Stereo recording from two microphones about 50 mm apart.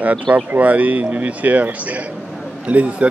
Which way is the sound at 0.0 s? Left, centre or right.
Right.